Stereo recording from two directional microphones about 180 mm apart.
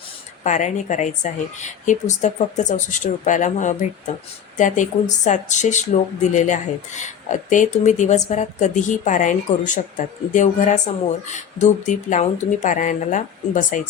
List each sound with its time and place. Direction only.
0.4 s speech: 45° left (ahead or behind)